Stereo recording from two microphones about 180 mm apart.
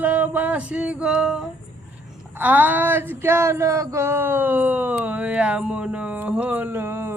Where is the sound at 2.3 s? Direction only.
10° right (ahead or behind).